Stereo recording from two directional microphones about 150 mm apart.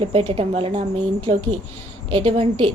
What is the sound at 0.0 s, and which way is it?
A woman's voice, 40° right (ahead or behind).